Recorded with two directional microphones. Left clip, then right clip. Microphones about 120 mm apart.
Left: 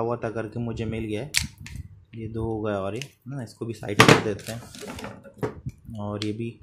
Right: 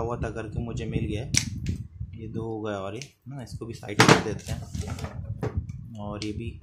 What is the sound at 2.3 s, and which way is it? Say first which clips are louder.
Speech: left 4 dB; 30° left (ahead or behind).